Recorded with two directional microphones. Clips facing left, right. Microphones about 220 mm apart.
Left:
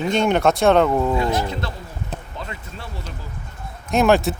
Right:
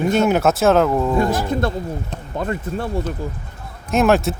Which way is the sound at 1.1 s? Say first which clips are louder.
Right 4 dB; 50° right (ahead or behind).